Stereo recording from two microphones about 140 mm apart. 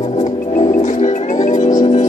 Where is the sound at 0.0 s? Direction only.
55° left (ahead or behind).